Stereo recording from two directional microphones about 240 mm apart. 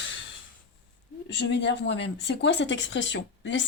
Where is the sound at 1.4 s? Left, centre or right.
Left.